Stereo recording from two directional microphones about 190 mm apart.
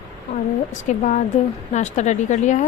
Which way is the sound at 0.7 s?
40° left (ahead or behind).